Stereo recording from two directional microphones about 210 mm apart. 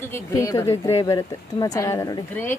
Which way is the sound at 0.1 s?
15° left (ahead or behind).